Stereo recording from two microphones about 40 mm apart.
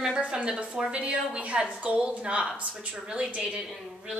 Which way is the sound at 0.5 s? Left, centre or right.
Right.